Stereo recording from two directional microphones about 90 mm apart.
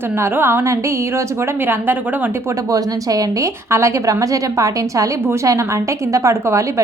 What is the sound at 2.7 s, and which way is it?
A woman's voice, 40° right (ahead or behind).